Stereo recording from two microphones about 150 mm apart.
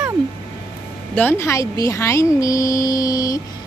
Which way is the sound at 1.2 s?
15° left (ahead or behind).